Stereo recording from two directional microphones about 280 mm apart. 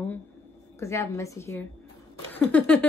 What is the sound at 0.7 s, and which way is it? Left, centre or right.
Speech, centre.